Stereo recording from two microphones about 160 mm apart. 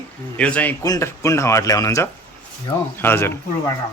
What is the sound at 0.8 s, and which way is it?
Speech, 20° left (ahead or behind).